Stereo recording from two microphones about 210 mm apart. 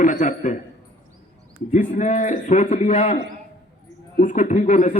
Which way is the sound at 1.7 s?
35° left (ahead or behind).